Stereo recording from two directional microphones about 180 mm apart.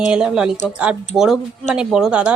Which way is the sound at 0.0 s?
5° right (ahead or behind).